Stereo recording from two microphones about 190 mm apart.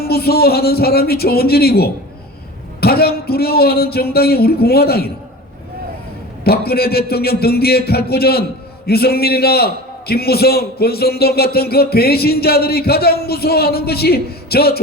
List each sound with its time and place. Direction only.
0.0 s a man's voice: 55° left (ahead or behind)
6.4 s a man's voice: 55° left (ahead or behind)